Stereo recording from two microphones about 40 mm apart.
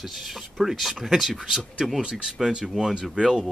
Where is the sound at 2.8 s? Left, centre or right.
Centre.